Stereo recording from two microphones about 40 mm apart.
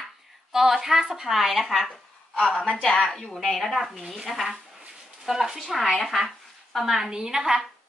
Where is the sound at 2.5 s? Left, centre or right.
Left.